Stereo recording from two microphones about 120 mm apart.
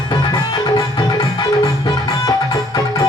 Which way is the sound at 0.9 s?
35° left (ahead or behind).